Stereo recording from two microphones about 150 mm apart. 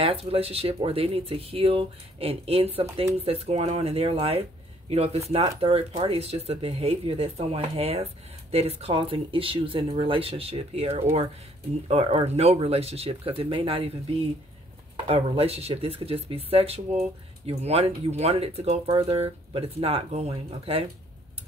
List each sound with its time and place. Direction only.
0.0 s speech: 40° right (ahead or behind)
15.0 s speech: 40° right (ahead or behind)